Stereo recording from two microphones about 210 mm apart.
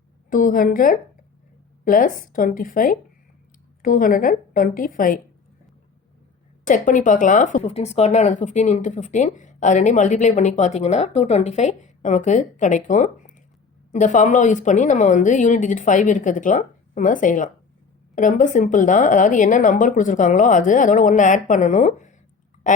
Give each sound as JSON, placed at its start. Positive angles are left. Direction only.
{"t": 0.3, "sound": "speech", "side_deg": 40}
{"t": 6.7, "sound": "speech", "side_deg": 40}